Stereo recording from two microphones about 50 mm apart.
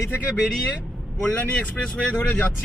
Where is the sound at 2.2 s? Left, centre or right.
Left.